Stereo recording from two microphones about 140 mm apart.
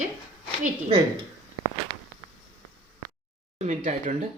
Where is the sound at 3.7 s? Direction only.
60° right (ahead or behind).